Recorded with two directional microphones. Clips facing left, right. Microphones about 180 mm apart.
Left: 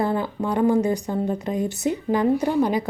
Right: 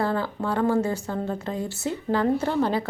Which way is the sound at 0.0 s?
15° left (ahead or behind).